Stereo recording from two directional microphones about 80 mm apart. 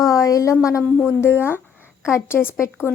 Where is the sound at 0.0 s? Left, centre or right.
Left.